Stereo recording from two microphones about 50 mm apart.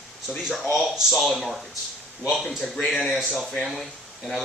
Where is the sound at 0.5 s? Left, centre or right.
Centre.